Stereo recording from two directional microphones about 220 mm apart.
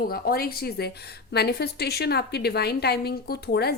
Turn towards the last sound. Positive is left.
turn(degrees=45)  # may be behind; listen again after turning